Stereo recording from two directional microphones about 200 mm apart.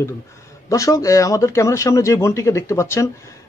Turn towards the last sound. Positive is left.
turn(degrees=15)  # may be behind; listen again after turning